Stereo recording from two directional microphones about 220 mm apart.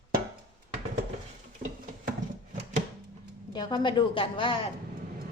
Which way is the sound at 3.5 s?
20° left (ahead or behind).